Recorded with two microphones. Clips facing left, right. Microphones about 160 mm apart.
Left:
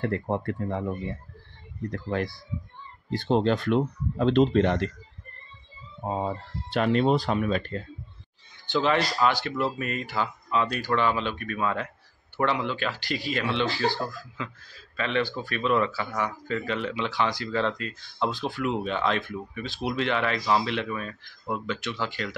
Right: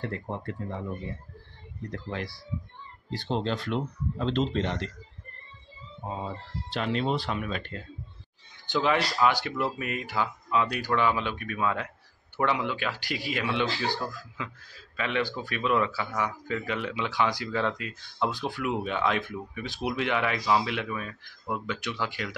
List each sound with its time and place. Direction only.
0.0 s speech: 55° left (ahead or behind)
1.9 s speech: 50° left (ahead or behind)
6.0 s speech: 55° left (ahead or behind)
8.6 s speech: 15° right (ahead or behind)